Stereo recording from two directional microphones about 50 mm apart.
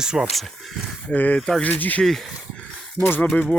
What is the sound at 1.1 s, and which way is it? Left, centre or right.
Speech, left.